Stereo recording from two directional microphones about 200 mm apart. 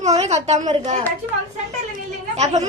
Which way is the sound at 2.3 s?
35° right (ahead or behind).